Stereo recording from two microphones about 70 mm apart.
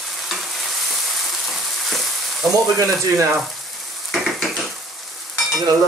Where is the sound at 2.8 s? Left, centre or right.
Right.